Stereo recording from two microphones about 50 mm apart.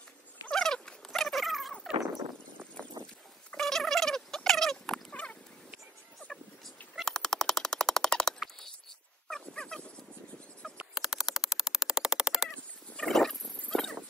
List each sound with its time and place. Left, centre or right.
0.5 s a sound: centre
3.0 s livestock: right
3.5 s fowl: centre
5.1 s dog: left
7.1 s machine gun: centre
9.3 s dog: centre
10.6 s a sound: centre
11.0 s crow: centre
12.9 s a sound: centre